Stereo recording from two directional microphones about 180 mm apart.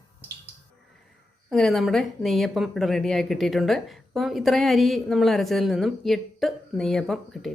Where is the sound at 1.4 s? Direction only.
Centre (ahead or behind).